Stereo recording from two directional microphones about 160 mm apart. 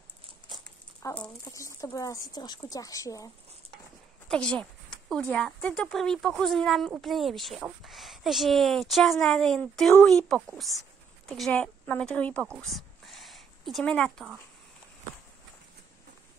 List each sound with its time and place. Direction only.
1.0 s speech: 20° left (ahead or behind)
4.3 s a sound: 5° left (ahead or behind)
5.3 s a woman's voice: 5° left (ahead or behind)